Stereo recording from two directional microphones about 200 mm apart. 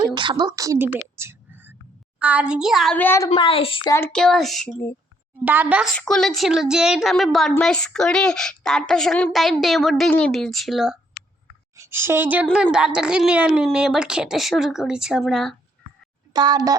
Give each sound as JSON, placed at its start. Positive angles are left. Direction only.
{"t": 0.1, "sound": "a woman's voice", "side_deg": -25}
{"t": 1.1, "sound": "a sound", "side_deg": -10}
{"t": 2.1, "sound": "a woman's voice", "side_deg": -5}
{"t": 3.2, "sound": "a woman's voice", "side_deg": 25}
{"t": 3.9, "sound": "a woman's voice", "side_deg": 5}
{"t": 11.8, "sound": "a woman's voice", "side_deg": -10}
{"t": 16.3, "sound": "a child's voice", "side_deg": -20}